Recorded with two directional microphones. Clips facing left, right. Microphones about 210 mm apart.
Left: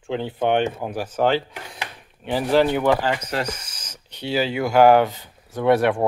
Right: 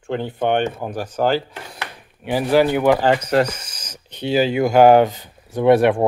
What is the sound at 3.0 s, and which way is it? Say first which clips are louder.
Speech: right 8 dB; 45° right (ahead or behind).